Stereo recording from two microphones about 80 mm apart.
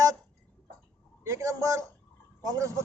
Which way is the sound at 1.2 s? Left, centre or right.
Right.